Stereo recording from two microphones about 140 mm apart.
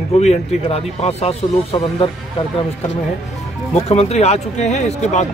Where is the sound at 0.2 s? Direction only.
50° left (ahead or behind).